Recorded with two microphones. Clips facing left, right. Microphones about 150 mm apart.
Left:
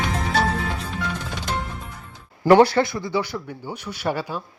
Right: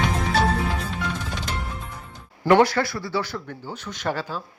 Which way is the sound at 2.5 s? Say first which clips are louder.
Left 3 dB; 30° left (ahead or behind).